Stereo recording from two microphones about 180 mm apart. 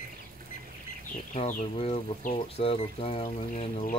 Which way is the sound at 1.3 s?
45° left (ahead or behind).